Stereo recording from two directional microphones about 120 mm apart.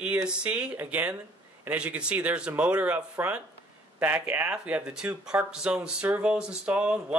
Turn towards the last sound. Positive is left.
turn(degrees=-10)  # may be behind; listen again after turning